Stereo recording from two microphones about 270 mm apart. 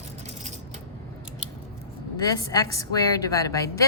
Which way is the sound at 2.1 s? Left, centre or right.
Centre.